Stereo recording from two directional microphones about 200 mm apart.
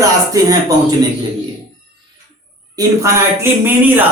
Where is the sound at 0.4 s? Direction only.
15° right (ahead or behind).